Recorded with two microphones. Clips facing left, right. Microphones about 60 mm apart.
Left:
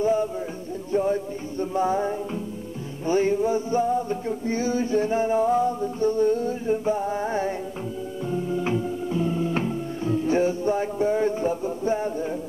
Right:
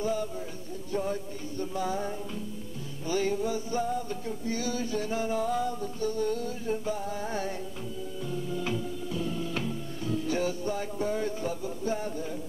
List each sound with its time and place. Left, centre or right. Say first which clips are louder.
0.0 s music: left 8 dB; left
3.1 s a sound: left 7 dB; left
8.3 s music: left 7 dB; left